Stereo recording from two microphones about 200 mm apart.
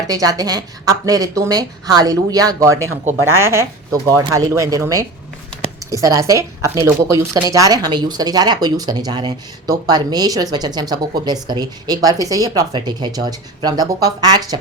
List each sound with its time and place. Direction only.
0.1 s a woman's voice: 20° right (ahead or behind)